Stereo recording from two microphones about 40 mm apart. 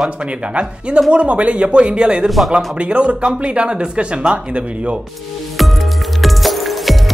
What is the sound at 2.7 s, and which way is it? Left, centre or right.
Speech, right.